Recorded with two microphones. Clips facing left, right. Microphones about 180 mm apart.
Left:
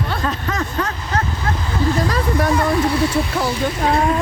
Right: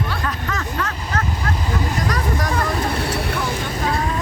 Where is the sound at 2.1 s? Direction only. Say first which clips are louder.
Left 4 dB; 25° left (ahead or behind).